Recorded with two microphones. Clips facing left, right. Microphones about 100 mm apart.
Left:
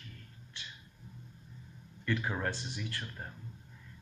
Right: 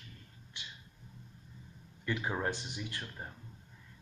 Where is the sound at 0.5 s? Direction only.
15° right (ahead or behind).